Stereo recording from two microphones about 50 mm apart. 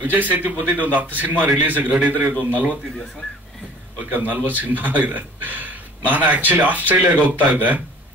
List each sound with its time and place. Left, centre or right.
0.0 s speech: right
4.1 s speech: right